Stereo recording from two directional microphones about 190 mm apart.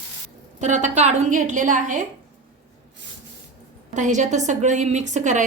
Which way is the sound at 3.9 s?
40° right (ahead or behind).